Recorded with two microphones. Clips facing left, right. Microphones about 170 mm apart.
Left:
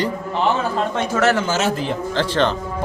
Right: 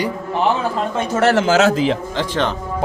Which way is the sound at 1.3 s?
90° right.